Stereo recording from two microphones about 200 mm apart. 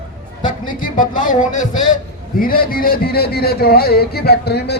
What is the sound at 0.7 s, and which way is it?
Speech, 40° left (ahead or behind).